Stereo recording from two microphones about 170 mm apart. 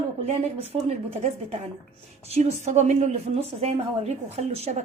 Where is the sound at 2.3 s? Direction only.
40° right (ahead or behind).